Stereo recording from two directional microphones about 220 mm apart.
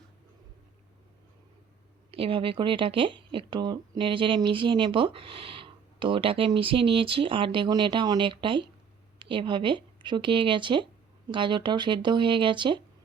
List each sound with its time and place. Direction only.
2.0 s speech: 25° right (ahead or behind)